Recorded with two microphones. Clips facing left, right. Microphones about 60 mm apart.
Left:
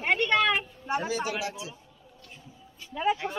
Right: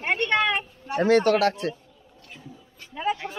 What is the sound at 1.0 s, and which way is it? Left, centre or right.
Speech, right.